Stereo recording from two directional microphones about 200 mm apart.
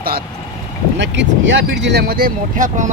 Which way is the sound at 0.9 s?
65° right (ahead or behind).